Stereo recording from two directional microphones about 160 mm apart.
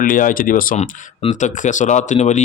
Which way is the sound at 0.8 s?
45° left (ahead or behind).